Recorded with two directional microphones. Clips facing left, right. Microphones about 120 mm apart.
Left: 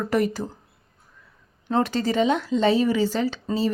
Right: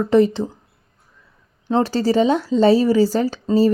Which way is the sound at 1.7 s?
30° right (ahead or behind).